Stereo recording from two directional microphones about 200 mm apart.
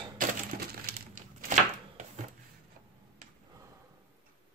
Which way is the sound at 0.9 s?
40° right (ahead or behind).